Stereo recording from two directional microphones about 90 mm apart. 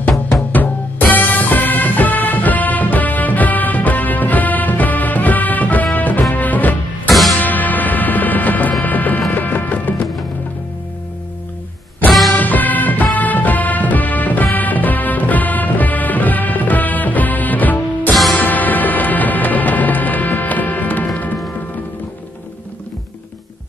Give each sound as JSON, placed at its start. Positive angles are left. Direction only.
{"t": 0.5, "sound": "music", "side_deg": 20}
{"t": 7.1, "sound": "music", "side_deg": 0}
{"t": 7.3, "sound": "music", "side_deg": 20}
{"t": 8.8, "sound": "a sound", "side_deg": 20}
{"t": 9.3, "sound": "music", "side_deg": 20}
{"t": 12.1, "sound": "music", "side_deg": 0}
{"t": 12.4, "sound": "music", "side_deg": 20}